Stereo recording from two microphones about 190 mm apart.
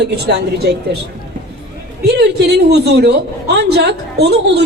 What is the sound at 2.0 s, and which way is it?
A man's voice, 60° right (ahead or behind).